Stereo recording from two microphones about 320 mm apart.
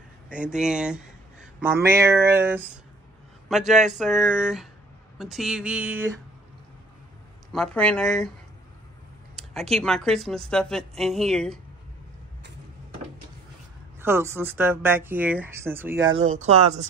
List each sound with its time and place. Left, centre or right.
0.3 s a man's voice: centre
7.5 s speech: centre
9.3 s speech: centre
14.0 s speech: centre
16.1 s speech: right